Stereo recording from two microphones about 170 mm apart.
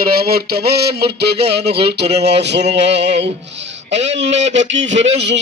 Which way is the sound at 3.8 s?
90° right.